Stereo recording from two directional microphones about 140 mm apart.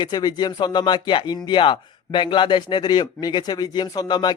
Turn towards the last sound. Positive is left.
turn(degrees=30)  # may be behind; listen again after turning